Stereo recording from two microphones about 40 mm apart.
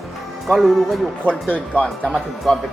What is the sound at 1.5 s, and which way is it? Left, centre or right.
Speech, left.